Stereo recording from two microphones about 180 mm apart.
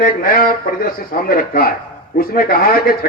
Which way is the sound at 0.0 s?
55° left (ahead or behind).